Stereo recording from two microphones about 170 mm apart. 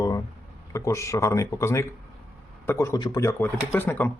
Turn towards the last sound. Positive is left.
turn(degrees=10)  # may be behind; listen again after turning